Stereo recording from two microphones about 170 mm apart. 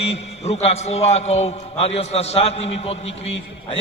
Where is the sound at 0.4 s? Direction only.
40° left (ahead or behind).